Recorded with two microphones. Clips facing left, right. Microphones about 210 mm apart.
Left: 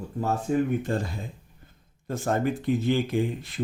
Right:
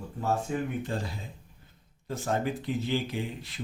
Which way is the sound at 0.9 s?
50° left (ahead or behind).